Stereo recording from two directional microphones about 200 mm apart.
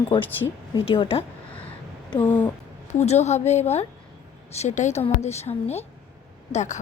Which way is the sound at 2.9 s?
35° left (ahead or behind).